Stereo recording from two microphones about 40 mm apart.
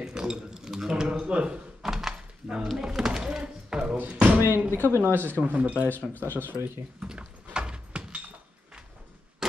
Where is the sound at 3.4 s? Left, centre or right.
Right.